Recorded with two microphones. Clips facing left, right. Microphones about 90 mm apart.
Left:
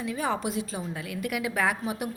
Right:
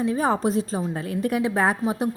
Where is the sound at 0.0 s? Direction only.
35° right (ahead or behind).